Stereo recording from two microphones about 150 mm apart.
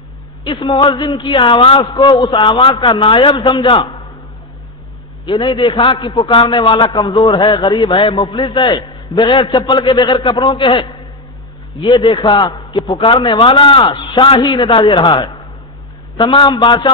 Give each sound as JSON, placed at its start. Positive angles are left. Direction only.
{"t": 0.4, "sound": "a man's voice", "side_deg": 35}
{"t": 5.2, "sound": "a man's voice", "side_deg": 30}